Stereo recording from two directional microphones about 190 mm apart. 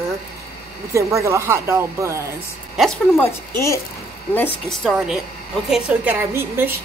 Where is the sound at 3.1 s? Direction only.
15° left (ahead or behind).